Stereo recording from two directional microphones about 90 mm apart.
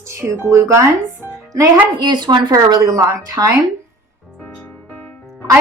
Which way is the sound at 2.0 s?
55° right (ahead or behind).